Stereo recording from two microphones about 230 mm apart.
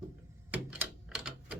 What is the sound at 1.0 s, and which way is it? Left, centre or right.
Typewriter, centre.